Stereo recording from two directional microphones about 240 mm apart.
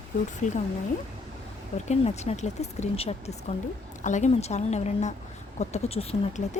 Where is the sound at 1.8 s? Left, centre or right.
Left.